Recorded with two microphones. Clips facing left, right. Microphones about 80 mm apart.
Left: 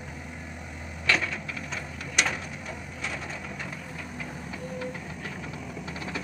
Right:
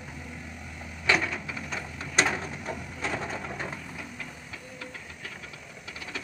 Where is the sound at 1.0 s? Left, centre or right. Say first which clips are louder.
Right 1 dB; centre.